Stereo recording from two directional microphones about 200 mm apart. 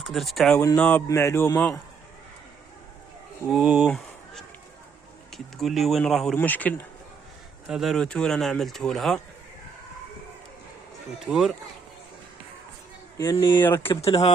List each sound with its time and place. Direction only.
0.0 s speech: centre (ahead or behind)
3.5 s speech: 5° right (ahead or behind)
11.3 s speech: centre (ahead or behind)
13.1 s speech: 20° left (ahead or behind)
14.0 s speech: 30° left (ahead or behind)